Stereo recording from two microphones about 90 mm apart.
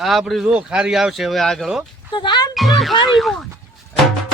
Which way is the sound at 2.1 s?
55° left (ahead or behind).